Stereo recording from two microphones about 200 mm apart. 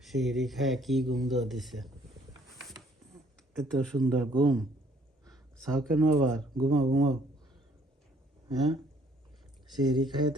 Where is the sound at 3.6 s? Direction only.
Centre (ahead or behind).